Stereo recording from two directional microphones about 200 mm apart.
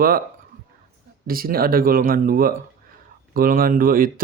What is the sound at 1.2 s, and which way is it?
Speech, 45° right (ahead or behind).